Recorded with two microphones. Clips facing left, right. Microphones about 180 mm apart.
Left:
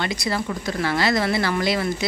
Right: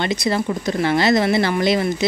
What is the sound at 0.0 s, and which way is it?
Speech, 20° right (ahead or behind).